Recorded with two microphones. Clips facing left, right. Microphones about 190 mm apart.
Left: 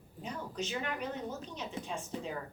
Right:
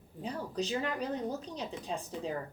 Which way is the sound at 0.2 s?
35° right (ahead or behind).